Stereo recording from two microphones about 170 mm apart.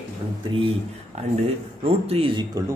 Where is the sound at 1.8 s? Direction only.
35° right (ahead or behind).